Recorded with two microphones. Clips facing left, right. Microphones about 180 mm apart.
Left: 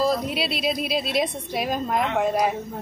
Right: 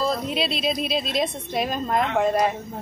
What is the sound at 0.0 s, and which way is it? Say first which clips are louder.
Speech: left 1 dB; 10° left (ahead or behind).